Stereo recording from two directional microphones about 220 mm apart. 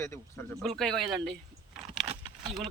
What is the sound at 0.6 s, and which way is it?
Speech, centre (ahead or behind).